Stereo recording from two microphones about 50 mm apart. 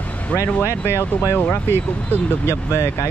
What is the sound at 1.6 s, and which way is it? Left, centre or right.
Speech, left.